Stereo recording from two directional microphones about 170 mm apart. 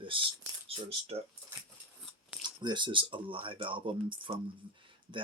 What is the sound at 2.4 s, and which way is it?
Speech, 25° right (ahead or behind).